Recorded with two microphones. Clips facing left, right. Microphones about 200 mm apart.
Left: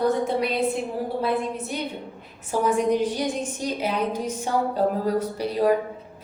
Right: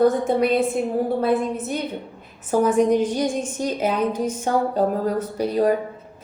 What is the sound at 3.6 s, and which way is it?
Speech, 50° right (ahead or behind).